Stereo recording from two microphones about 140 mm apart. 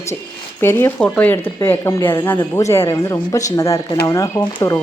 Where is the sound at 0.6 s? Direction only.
15° left (ahead or behind).